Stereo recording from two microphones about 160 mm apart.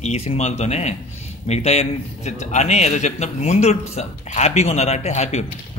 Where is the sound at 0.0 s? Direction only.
40° left (ahead or behind).